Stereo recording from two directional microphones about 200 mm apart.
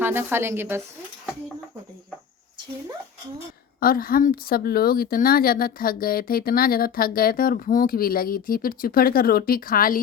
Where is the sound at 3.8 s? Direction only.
45° left (ahead or behind).